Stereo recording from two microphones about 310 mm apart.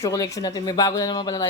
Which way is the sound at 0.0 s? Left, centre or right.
Centre.